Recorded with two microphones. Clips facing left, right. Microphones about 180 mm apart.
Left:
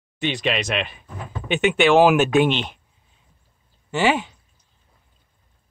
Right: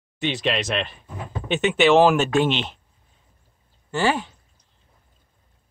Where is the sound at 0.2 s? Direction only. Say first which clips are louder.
Even; centre (ahead or behind).